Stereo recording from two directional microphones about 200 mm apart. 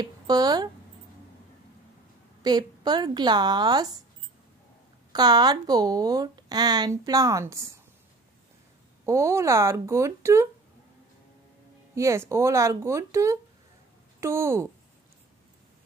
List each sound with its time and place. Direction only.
0.0 s speech: 20° right (ahead or behind)
2.4 s speech: 20° right (ahead or behind)
5.1 s speech: 20° right (ahead or behind)
9.0 s speech: 15° right (ahead or behind)
11.9 s speech: 15° right (ahead or behind)